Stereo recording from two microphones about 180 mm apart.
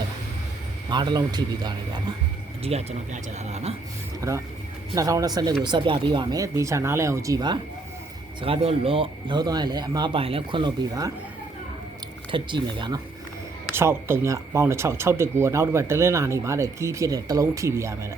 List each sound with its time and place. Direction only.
0.9 s speech: 25° right (ahead or behind)
2.6 s speech: 35° right (ahead or behind)
4.2 s speech: 20° right (ahead or behind)
12.3 s speech: 25° right (ahead or behind)
13.7 s speech: 15° right (ahead or behind)